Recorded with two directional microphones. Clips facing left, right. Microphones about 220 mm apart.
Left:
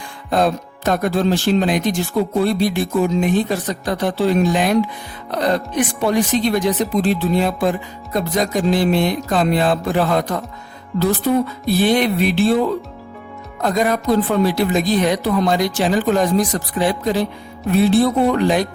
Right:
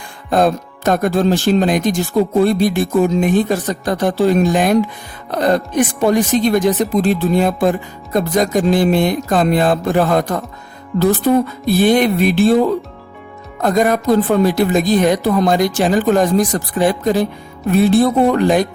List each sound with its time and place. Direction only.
0.3 s speech: 50° right (ahead or behind)